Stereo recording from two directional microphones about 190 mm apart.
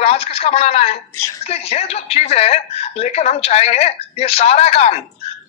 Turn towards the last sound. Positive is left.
turn(degrees=35)  # may be behind; listen again after turning